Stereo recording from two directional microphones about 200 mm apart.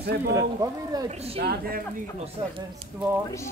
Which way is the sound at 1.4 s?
50° right (ahead or behind).